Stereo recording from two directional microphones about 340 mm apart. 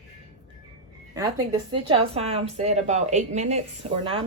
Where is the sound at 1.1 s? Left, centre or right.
Centre.